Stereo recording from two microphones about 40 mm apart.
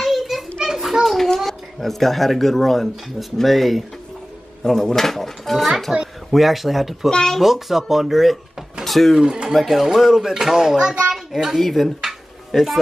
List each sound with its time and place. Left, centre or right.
0.0 s children playing: centre
1.0 s a child's voice: centre
5.9 s speech: centre
7.1 s speech: left
7.3 s speech: centre
9.2 s speech: centre
9.5 s speech: centre